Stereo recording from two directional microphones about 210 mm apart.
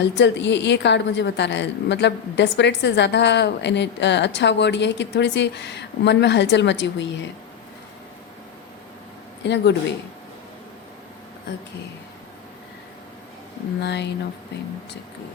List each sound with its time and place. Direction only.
0.0 s a woman's voice: 55° left (ahead or behind)
9.4 s a woman's voice: 55° left (ahead or behind)
13.8 s a woman's voice: 55° left (ahead or behind)